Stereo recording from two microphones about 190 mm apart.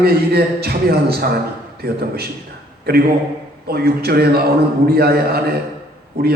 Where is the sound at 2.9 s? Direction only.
55° right (ahead or behind).